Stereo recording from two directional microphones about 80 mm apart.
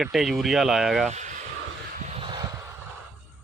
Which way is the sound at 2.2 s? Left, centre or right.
Right.